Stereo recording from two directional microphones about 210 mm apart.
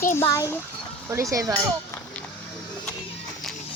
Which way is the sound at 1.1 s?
15° right (ahead or behind).